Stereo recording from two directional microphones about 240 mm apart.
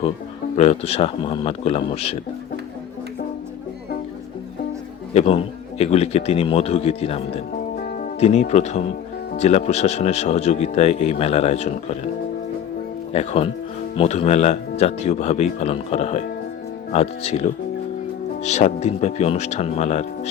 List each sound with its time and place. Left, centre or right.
0.5 s speech: left
5.1 s speech: left
8.2 s speech: left
13.1 s speech: left